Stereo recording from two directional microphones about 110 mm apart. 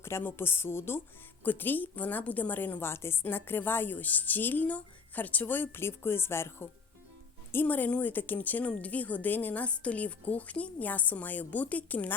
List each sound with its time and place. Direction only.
0.0 s a woman's voice: 20° left (ahead or behind)